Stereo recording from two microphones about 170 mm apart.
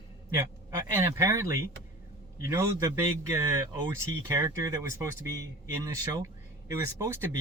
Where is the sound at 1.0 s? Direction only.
15° right (ahead or behind).